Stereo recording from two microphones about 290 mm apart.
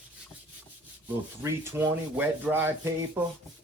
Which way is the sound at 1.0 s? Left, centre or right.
Centre.